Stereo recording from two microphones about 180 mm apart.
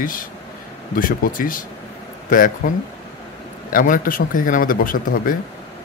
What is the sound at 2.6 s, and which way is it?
Speech, 50° left (ahead or behind).